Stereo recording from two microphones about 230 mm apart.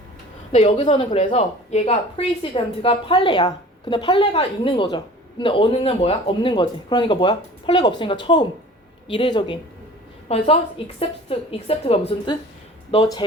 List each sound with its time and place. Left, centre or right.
0.5 s speech: left